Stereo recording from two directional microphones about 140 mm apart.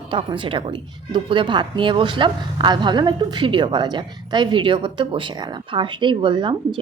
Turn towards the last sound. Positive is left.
turn(degrees=-35)  # may be behind; listen again after turning